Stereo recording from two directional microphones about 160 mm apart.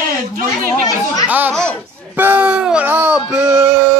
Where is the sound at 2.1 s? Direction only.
10° right (ahead or behind).